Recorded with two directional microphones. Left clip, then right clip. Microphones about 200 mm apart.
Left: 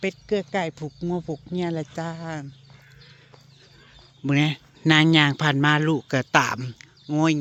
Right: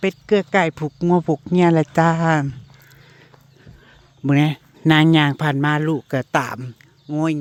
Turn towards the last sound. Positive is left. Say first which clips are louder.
# even
turn(degrees=-5)  # may be behind; listen again after turning